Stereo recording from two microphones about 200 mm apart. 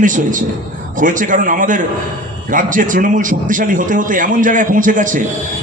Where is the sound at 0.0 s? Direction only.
40° right (ahead or behind).